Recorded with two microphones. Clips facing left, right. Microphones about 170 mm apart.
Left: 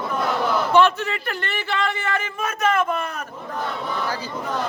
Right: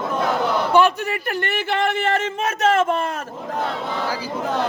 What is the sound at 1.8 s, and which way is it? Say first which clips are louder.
Speech: right 5 dB; 70° right (ahead or behind).